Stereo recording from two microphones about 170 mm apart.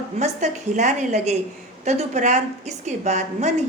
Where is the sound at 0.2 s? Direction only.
45° right (ahead or behind).